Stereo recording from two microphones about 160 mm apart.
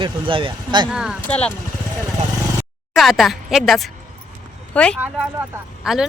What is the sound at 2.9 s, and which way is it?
A woman's voice, centre (ahead or behind).